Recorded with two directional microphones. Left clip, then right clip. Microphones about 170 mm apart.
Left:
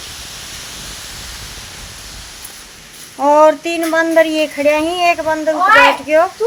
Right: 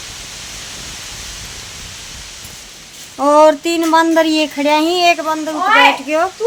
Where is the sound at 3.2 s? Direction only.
15° right (ahead or behind).